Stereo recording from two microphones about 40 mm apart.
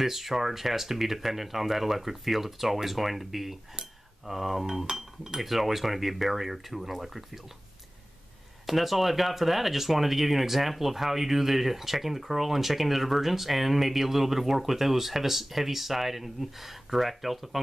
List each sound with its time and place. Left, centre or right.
0.0 s speech: centre
4.9 s speech: centre
5.4 s speech: centre
8.6 s speech: centre